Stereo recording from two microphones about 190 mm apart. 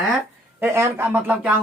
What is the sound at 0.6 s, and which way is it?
Speech, 15° right (ahead or behind).